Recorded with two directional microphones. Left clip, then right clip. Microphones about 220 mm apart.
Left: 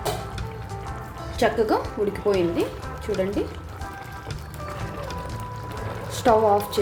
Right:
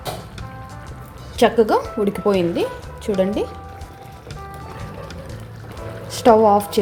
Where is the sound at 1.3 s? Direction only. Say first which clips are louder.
Right 6 dB; 30° right (ahead or behind).